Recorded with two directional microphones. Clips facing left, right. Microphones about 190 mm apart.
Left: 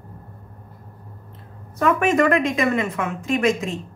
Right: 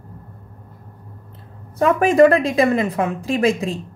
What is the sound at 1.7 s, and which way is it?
A woman's voice, 30° right (ahead or behind).